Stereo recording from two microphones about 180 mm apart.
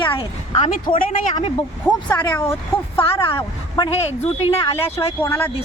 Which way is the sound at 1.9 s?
10° left (ahead or behind).